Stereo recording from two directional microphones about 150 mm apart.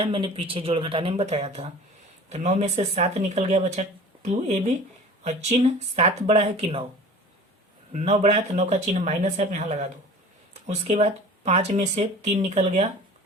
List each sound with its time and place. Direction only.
0.0 s speech: 35° right (ahead or behind)
7.9 s speech: 45° right (ahead or behind)